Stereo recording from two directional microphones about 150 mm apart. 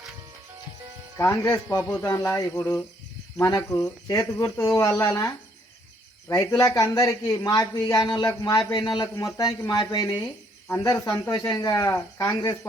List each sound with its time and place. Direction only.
1.2 s speech: 20° left (ahead or behind)